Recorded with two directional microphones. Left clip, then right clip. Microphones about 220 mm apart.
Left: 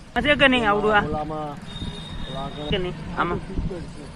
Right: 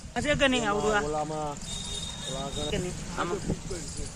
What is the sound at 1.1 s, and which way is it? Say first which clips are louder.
Speech: left 3 dB; 60° right (ahead or behind).